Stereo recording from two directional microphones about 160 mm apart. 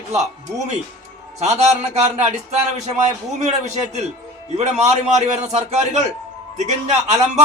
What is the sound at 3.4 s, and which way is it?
A man's voice, 45° right (ahead or behind).